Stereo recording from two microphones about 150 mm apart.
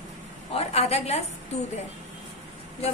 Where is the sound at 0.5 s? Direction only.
45° left (ahead or behind).